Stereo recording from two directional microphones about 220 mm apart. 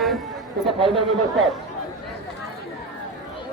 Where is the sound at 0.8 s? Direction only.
25° right (ahead or behind).